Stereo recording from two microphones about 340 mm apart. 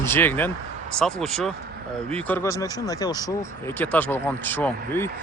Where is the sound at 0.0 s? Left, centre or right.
Centre.